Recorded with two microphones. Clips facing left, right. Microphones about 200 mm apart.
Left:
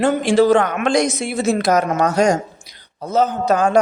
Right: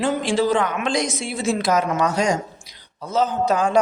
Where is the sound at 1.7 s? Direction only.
45° left (ahead or behind).